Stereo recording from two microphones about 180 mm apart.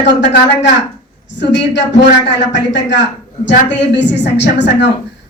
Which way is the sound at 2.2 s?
80° left.